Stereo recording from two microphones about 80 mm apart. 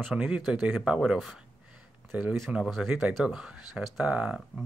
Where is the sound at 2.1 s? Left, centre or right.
Centre.